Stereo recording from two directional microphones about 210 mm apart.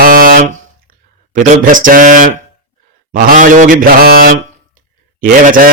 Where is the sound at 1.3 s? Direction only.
40° right (ahead or behind).